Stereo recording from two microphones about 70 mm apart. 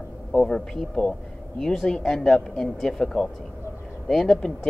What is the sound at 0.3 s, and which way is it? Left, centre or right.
Speech, centre.